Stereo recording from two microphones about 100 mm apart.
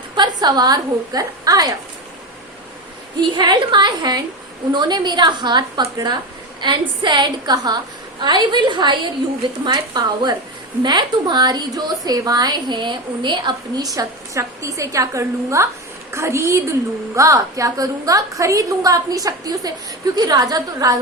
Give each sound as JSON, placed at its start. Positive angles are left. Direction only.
{"t": 0.2, "sound": "a woman's voice", "side_deg": -45}
{"t": 3.2, "sound": "a woman's voice", "side_deg": -50}